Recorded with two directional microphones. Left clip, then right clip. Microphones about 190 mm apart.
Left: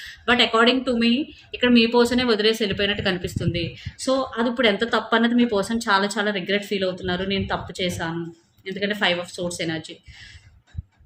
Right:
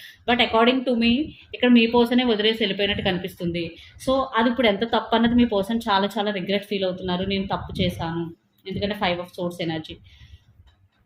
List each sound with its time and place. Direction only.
0.3 s speech: 20° left (ahead or behind)